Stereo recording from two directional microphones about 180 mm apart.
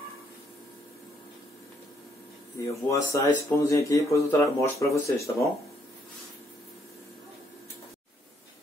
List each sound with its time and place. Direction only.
2.6 s speech: 15° left (ahead or behind)